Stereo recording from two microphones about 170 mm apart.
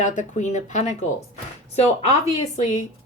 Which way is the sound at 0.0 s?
45° left (ahead or behind).